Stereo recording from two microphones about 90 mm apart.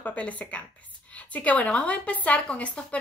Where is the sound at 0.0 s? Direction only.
15° left (ahead or behind).